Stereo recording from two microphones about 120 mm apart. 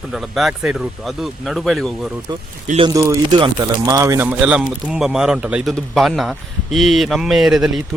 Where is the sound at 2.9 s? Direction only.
30° right (ahead or behind).